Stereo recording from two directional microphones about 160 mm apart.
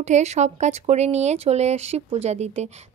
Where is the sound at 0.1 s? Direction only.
45° right (ahead or behind).